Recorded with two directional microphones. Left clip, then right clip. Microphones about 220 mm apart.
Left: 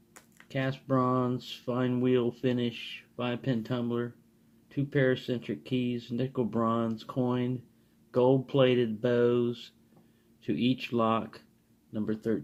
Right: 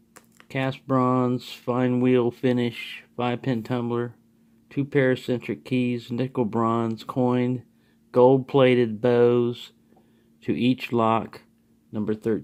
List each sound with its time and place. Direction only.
0.4 s speech: 45° right (ahead or behind)